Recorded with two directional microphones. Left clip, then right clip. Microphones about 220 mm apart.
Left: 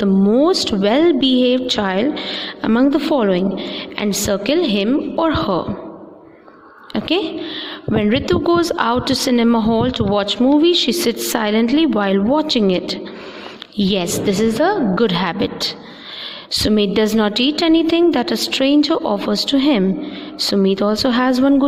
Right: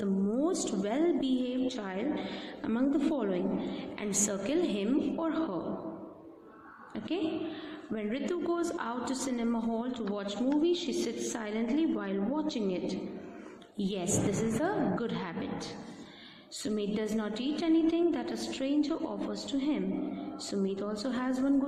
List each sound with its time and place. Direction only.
0.0 s a woman's voice: 40° left (ahead or behind)
6.9 s a woman's voice: 45° left (ahead or behind)